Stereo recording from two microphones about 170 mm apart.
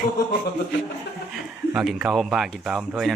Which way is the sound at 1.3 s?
Centre (ahead or behind).